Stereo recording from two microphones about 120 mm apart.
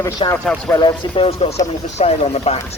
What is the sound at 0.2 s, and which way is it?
A man's voice, 45° left (ahead or behind).